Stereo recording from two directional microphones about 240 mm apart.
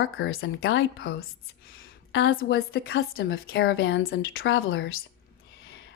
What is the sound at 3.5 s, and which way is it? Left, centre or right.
Speech, left.